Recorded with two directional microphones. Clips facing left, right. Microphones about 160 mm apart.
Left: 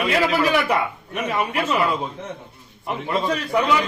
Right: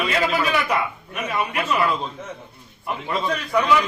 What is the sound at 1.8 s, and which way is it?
Speech, 10° left (ahead or behind).